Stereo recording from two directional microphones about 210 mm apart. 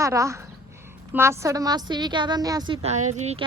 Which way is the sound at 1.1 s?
10° right (ahead or behind).